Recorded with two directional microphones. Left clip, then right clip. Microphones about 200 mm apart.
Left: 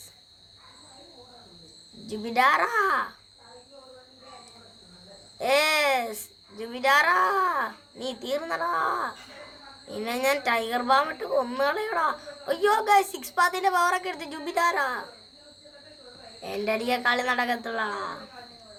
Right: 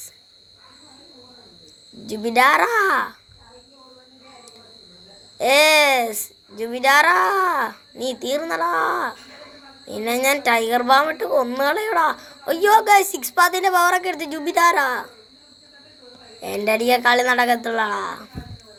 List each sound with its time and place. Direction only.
2.0 s speech: 25° right (ahead or behind)
5.4 s speech: 25° right (ahead or behind)
16.4 s speech: 25° right (ahead or behind)